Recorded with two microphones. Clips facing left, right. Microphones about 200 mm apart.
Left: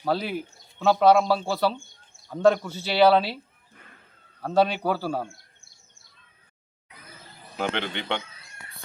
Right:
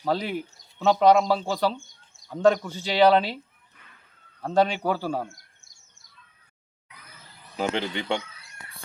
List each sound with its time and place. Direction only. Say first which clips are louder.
0.1 s speech: even; 10° left (ahead or behind)
4.6 s speech: even; 10° left (ahead or behind)
7.6 s a man's voice: right 2 dB; 5° right (ahead or behind)